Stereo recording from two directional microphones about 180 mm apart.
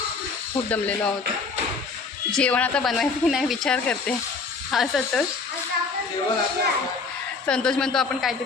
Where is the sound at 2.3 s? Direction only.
5° left (ahead or behind).